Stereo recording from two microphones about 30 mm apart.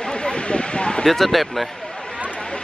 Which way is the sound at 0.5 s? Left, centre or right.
Left.